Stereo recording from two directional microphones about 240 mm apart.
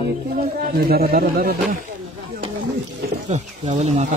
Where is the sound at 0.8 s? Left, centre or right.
Right.